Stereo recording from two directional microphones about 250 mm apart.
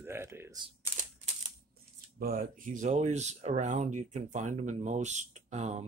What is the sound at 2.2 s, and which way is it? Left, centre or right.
Speech, right.